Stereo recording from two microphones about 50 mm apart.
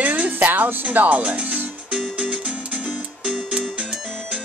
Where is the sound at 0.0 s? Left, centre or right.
Right.